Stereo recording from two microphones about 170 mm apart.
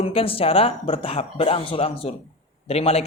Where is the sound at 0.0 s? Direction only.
35° left (ahead or behind).